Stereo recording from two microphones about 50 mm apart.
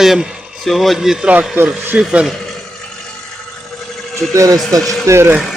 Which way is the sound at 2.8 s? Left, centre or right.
Centre.